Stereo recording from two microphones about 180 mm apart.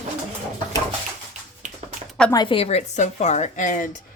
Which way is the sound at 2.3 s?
30° left (ahead or behind).